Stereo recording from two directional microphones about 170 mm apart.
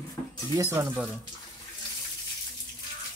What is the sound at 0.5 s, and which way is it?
Speech, 15° right (ahead or behind).